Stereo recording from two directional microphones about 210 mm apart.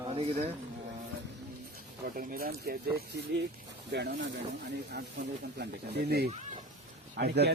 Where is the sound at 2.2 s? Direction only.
45° right (ahead or behind).